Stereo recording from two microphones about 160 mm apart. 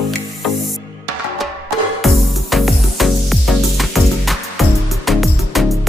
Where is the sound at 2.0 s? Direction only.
Centre (ahead or behind).